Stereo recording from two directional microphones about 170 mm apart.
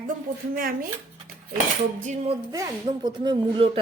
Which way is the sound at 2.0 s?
45° right (ahead or behind).